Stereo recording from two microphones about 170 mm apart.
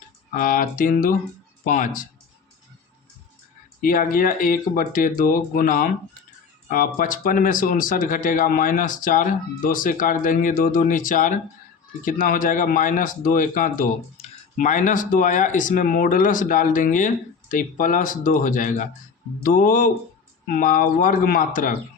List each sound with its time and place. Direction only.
0.3 s speech: 55° left (ahead or behind)
3.8 s speech: 55° left (ahead or behind)